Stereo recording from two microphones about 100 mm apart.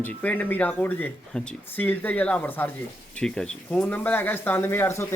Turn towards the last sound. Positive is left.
turn(degrees=25)  # may be behind; listen again after turning